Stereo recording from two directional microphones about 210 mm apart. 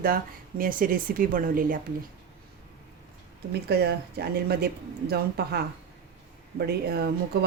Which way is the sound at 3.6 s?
50° right (ahead or behind).